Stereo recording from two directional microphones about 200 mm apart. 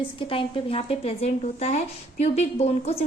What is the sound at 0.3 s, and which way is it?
Speech, 25° left (ahead or behind).